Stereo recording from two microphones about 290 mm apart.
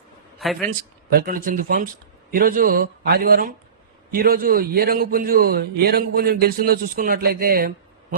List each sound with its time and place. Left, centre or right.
0.4 s a man's voice: centre
1.1 s a man's voice: right